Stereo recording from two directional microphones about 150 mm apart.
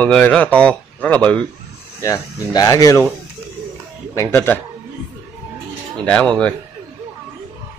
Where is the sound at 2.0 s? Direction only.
20° left (ahead or behind).